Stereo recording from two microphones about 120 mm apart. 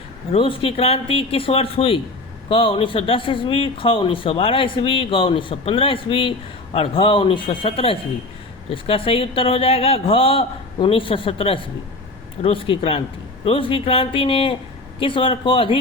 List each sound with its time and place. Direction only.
0.3 s speech: 50° left (ahead or behind)